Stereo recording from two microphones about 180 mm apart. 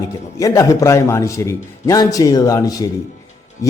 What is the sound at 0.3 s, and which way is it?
A man's voice, 20° left (ahead or behind).